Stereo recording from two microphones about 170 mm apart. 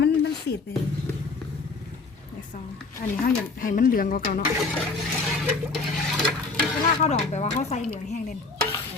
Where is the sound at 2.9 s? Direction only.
55° left (ahead or behind).